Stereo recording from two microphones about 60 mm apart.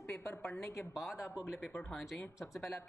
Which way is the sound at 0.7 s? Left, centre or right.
Left.